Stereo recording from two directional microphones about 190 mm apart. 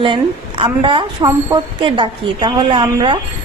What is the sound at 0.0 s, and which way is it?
A woman's voice, 25° right (ahead or behind).